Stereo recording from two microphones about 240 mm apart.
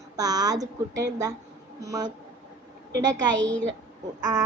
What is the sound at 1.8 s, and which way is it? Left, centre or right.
Speech, centre.